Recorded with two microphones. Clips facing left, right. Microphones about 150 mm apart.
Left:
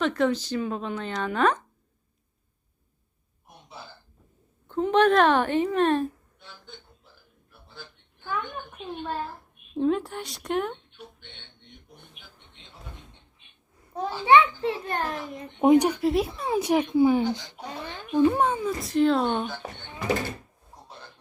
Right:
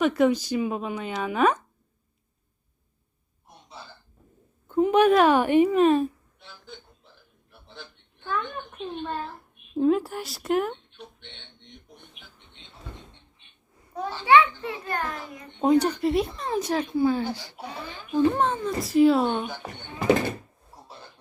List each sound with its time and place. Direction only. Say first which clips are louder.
0.0 s a woman's voice: right 3 dB; 10° right (ahead or behind)
4.7 s a woman's voice: right 2 dB; 10° right (ahead or behind)
7.8 s a sound: right 1 dB; 5° left (ahead or behind)
9.7 s speech: right 3 dB; 5° right (ahead or behind)
14.1 s a child's voice: even; 15° left (ahead or behind)
15.6 s speech: left 2 dB; 15° left (ahead or behind)
16.0 s speech: even; centre (ahead or behind)
18.8 s speech: right 4 dB; 5° right (ahead or behind)